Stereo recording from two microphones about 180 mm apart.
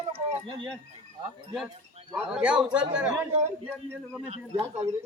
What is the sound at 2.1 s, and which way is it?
A man's voice, 5° right (ahead or behind).